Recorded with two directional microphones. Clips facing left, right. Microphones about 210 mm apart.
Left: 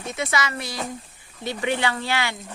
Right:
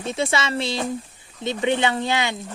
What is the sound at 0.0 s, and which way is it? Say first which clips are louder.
Speech: right 3 dB; 30° right (ahead or behind).